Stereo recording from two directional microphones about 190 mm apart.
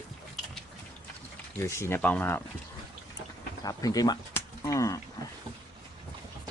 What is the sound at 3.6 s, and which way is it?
Speech, 20° left (ahead or behind).